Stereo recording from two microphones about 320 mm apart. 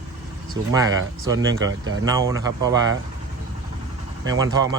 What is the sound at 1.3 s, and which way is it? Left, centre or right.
Speech, right.